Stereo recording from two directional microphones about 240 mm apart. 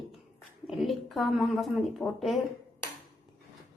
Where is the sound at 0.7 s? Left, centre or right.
Centre.